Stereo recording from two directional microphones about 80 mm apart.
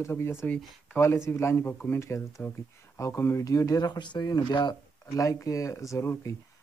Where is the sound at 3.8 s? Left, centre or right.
Left.